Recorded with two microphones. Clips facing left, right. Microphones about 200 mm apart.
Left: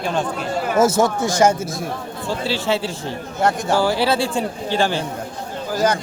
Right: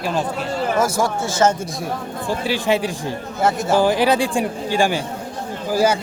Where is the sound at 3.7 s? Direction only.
15° right (ahead or behind).